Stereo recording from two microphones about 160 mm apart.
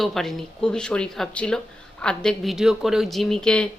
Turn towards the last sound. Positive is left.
turn(degrees=5)  # may be behind; listen again after turning